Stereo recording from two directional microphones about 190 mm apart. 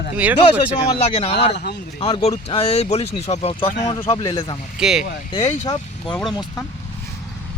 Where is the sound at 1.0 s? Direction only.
30° left (ahead or behind).